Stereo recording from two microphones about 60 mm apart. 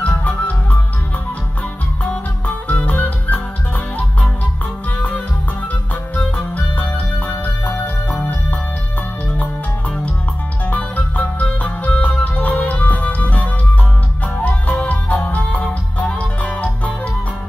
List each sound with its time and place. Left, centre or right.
0.0 s music: left
2.4 s music: left
6.1 s music: left
10.6 s music: left